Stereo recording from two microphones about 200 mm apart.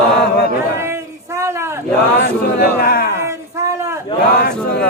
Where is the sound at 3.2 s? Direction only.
15° right (ahead or behind).